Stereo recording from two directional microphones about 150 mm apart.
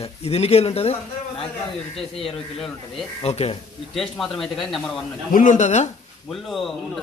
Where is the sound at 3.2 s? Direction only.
45° left (ahead or behind).